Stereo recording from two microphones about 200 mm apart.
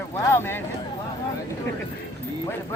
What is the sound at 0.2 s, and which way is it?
Speech, 15° left (ahead or behind).